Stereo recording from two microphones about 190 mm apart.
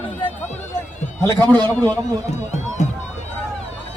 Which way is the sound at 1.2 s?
15° left (ahead or behind).